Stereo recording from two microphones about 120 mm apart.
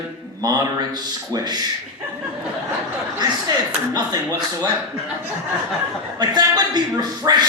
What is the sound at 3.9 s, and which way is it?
Speech, 35° right (ahead or behind).